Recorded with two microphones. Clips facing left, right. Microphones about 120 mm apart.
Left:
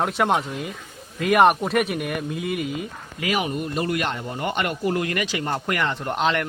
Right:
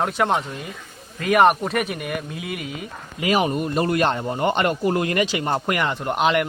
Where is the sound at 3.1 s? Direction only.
25° right (ahead or behind).